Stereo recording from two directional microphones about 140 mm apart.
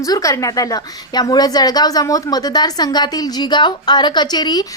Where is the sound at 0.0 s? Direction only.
25° left (ahead or behind).